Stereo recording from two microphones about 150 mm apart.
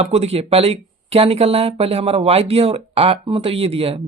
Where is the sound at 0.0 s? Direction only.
45° right (ahead or behind).